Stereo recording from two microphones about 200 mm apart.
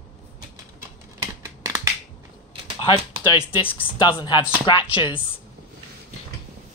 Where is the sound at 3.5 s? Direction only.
25° left (ahead or behind).